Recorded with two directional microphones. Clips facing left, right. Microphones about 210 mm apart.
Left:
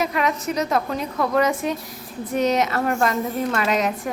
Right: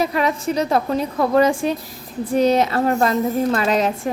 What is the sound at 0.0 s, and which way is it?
A woman's voice, 30° right (ahead or behind).